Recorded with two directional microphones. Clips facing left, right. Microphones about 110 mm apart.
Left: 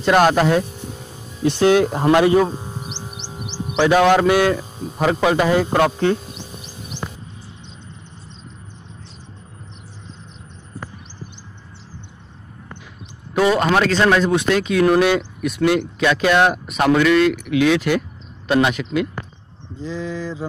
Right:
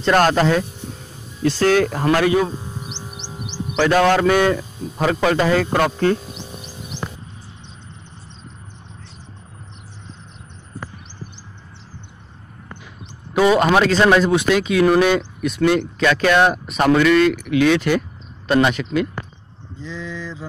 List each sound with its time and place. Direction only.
0.0 s speech: 10° left (ahead or behind)
13.3 s a man's voice: 5° right (ahead or behind)
19.8 s a sound: 40° left (ahead or behind)